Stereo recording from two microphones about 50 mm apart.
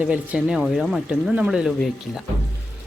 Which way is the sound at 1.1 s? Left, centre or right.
Right.